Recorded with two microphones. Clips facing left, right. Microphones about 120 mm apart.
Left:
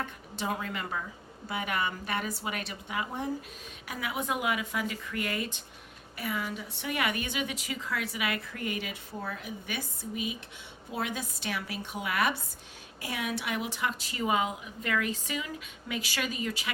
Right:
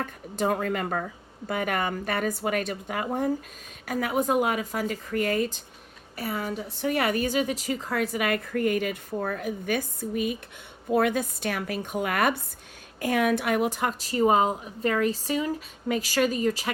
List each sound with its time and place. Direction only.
0.0 s a woman's voice: 45° right (ahead or behind)